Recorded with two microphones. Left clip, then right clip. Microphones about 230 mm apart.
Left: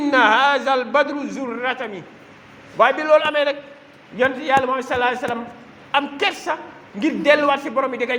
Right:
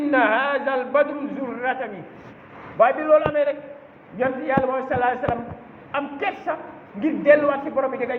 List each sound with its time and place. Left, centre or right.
0.1 s a man's voice: left